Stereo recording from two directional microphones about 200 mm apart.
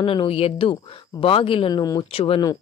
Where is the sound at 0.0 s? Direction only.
25° left (ahead or behind).